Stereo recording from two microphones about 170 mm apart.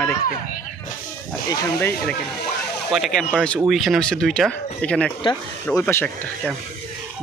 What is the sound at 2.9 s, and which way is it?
Speech, centre (ahead or behind).